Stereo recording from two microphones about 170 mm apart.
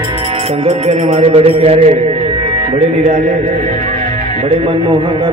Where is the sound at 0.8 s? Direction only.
40° right (ahead or behind).